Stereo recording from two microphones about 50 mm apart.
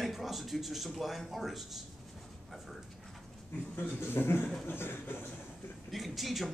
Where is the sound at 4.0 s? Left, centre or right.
Left.